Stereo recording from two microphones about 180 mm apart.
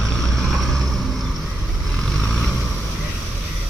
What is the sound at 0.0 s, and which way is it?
Vehicle, 5° left (ahead or behind).